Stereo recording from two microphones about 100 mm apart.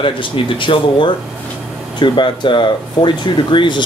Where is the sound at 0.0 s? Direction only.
60° left (ahead or behind).